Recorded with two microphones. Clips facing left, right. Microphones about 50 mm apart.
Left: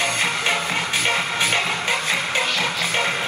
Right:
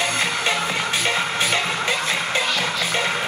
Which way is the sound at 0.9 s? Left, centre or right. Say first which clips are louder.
Left 1 dB; left.